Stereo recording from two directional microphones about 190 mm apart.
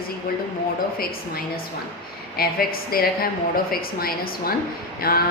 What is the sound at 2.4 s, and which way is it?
A woman's voice, 50° left (ahead or behind).